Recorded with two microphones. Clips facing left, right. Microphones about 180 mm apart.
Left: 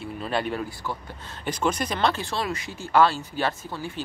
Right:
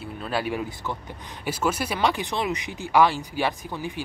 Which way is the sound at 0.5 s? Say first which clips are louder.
Right 1 dB; 20° right (ahead or behind).